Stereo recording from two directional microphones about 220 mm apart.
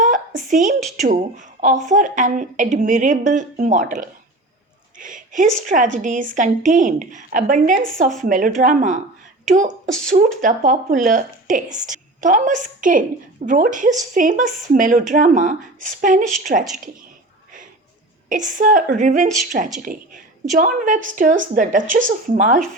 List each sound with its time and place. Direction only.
0.0 s a sound: 35° right (ahead or behind)
0.8 s speech: centre (ahead or behind)
1.0 s a woman's voice: 35° right (ahead or behind)
18.3 s a woman's voice: 35° right (ahead or behind)